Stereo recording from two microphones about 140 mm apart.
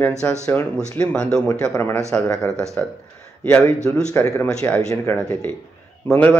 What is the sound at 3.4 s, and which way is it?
Speech, 10° left (ahead or behind).